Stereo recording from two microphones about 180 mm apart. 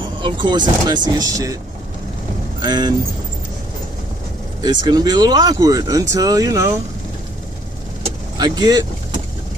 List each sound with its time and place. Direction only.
0.2 s speech: 25° right (ahead or behind)
2.6 s speech: 25° right (ahead or behind)
4.6 s speech: 20° right (ahead or behind)
8.4 s speech: 25° right (ahead or behind)